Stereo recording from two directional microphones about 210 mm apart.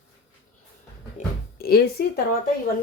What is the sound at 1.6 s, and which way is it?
Speech, 50° left (ahead or behind).